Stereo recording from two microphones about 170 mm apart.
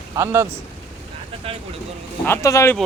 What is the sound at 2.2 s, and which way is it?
Speech, 15° left (ahead or behind).